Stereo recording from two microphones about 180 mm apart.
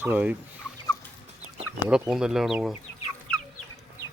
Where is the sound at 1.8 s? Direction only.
5° right (ahead or behind).